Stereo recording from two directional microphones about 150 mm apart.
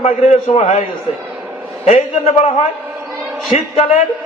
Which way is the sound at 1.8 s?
40° left (ahead or behind).